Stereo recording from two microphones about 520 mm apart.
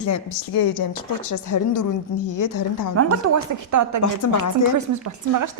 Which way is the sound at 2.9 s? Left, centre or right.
Right.